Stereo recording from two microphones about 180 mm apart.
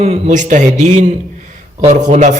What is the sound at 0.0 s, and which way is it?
A man's voice, 40° right (ahead or behind).